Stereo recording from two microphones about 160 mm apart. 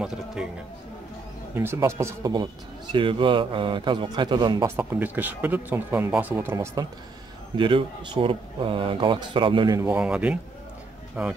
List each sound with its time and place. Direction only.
0.0 s speech: 5° right (ahead or behind)
1.5 s speech: 15° right (ahead or behind)
2.9 s speech: 30° right (ahead or behind)
4.6 s speech: 10° right (ahead or behind)
7.5 s speech: 30° right (ahead or behind)
9.8 s speech: 10° right (ahead or behind)